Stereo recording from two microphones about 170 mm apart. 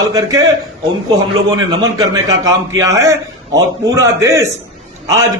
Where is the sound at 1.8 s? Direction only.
20° right (ahead or behind).